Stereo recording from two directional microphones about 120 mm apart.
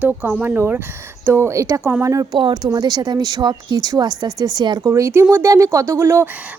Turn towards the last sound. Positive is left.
turn(degrees=-20)  # may be behind; listen again after turning